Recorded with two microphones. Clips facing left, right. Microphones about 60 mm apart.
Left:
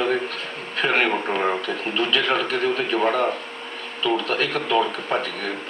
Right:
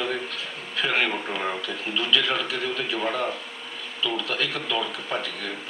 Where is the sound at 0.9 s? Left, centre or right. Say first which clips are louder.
Left 5 dB; left.